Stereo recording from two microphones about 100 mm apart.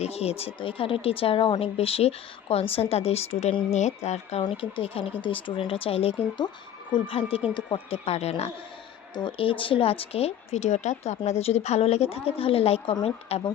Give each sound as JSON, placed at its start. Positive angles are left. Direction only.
{"t": 0.0, "sound": "speech", "side_deg": 90}
{"t": 4.5, "sound": "speech", "side_deg": 70}
{"t": 5.2, "sound": "speech", "side_deg": 55}
{"t": 8.0, "sound": "speech", "side_deg": 90}
{"t": 9.1, "sound": "a woman's voice", "side_deg": 55}
{"t": 13.3, "sound": "speech", "side_deg": 75}